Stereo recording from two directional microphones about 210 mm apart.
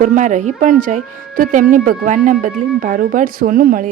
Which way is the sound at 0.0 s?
35° right (ahead or behind).